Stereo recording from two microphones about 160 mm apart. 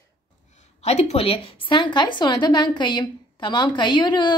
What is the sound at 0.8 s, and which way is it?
A woman's voice, 40° left (ahead or behind).